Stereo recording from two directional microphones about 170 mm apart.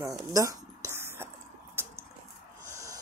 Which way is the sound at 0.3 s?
20° right (ahead or behind).